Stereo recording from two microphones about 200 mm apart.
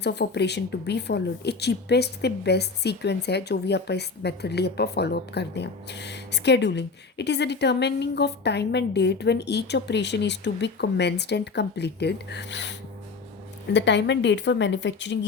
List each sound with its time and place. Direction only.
0.0 s speech: 60° left (ahead or behind)
13.7 s speech: 60° left (ahead or behind)